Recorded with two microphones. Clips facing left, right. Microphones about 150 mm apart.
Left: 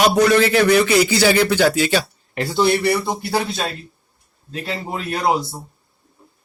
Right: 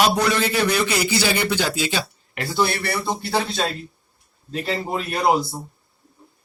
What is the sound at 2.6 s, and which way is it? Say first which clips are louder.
Speech: left 7 dB; 15° left (ahead or behind).